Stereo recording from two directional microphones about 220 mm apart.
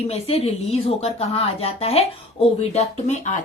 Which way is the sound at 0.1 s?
25° left (ahead or behind).